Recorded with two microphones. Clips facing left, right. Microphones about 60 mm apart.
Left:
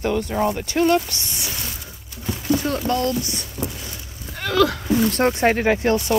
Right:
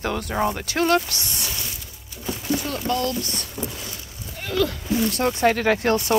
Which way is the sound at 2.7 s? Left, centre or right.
Left.